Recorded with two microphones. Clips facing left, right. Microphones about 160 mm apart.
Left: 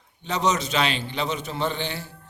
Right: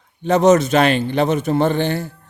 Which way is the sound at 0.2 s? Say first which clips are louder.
Right 12 dB; 50° right (ahead or behind).